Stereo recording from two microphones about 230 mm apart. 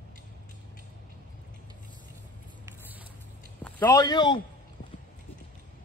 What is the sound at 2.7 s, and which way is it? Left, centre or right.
Vehicle, centre.